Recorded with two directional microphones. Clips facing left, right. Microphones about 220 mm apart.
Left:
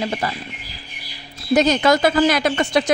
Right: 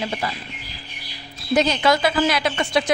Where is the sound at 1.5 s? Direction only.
45° left (ahead or behind).